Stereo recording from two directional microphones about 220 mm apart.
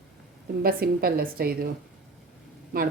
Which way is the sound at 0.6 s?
45° right (ahead or behind).